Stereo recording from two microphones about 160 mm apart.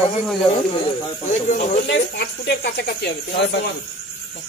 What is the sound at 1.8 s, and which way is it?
Speech, 90° left.